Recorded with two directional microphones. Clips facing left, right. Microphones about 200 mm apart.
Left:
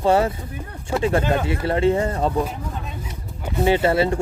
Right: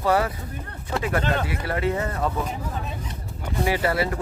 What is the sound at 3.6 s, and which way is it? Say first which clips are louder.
Speech: left 6 dB; 25° left (ahead or behind).